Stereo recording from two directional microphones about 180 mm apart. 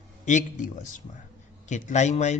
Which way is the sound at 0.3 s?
45° left (ahead or behind).